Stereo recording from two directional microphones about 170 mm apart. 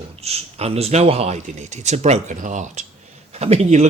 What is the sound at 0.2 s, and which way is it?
Speech, 35° right (ahead or behind).